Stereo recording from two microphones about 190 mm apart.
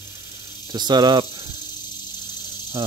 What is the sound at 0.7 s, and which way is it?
Speech, 20° right (ahead or behind).